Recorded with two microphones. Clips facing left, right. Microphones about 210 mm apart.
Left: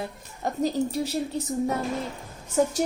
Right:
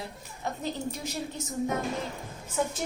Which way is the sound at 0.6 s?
35° left (ahead or behind).